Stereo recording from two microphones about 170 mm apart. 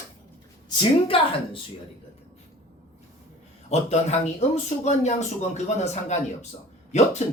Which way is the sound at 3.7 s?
40° left (ahead or behind).